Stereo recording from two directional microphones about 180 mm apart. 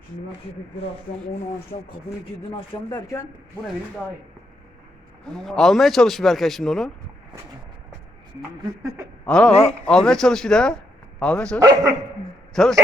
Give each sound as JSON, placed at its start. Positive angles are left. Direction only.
{"t": 2.7, "sound": "speech", "side_deg": 20}
{"t": 5.2, "sound": "a man's voice", "side_deg": 5}
{"t": 8.4, "sound": "speech", "side_deg": -15}
{"t": 9.2, "sound": "a man's voice", "side_deg": 5}
{"t": 9.5, "sound": "a man's voice", "side_deg": 35}
{"t": 9.8, "sound": "a man's voice", "side_deg": 5}
{"t": 11.6, "sound": "speech", "side_deg": -20}
{"t": 12.6, "sound": "a man's voice", "side_deg": 5}